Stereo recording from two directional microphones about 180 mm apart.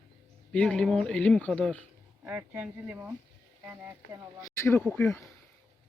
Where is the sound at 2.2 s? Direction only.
10° right (ahead or behind).